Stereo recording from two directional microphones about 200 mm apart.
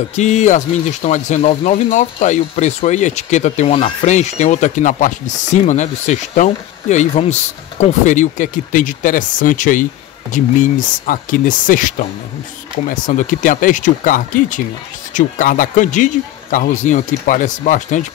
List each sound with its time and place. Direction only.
0.1 s speech: 35° left (ahead or behind)